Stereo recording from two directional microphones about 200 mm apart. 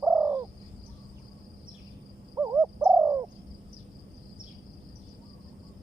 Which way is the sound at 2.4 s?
10° right (ahead or behind).